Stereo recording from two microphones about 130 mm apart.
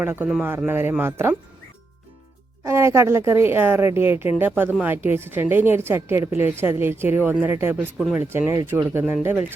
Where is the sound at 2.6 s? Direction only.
20° right (ahead or behind).